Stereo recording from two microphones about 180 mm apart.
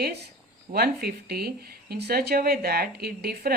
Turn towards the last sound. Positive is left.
turn(degrees=-60)  # may be behind; listen again after turning